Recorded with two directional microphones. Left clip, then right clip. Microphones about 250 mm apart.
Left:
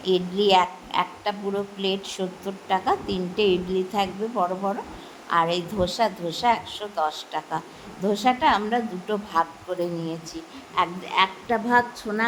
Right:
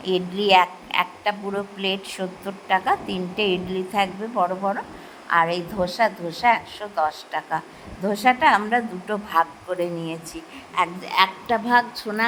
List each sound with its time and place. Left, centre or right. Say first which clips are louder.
0.0 s a woman's voice: left 1 dB; centre